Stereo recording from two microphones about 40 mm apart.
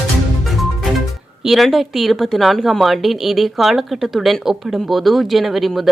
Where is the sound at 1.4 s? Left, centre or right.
Centre.